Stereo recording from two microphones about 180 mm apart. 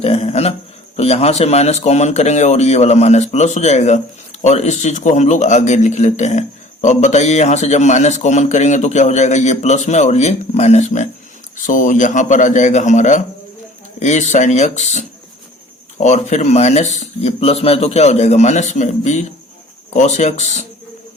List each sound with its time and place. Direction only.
0.0 s a man's voice: 35° left (ahead or behind)